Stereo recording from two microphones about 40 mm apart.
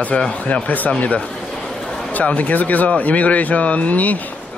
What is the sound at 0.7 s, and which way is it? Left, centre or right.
Speech, left.